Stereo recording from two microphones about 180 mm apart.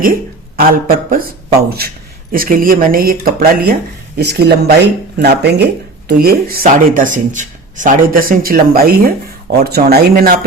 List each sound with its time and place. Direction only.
0.5 s speech: 50° right (ahead or behind)
2.3 s speech: 55° right (ahead or behind)